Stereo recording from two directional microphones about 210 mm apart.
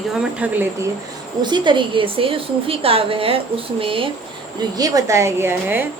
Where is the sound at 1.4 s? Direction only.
20° right (ahead or behind).